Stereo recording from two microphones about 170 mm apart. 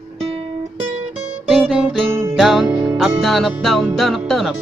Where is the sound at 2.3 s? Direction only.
Centre (ahead or behind).